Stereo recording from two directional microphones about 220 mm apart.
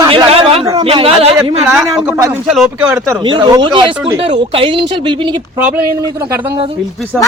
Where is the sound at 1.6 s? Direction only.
10° right (ahead or behind).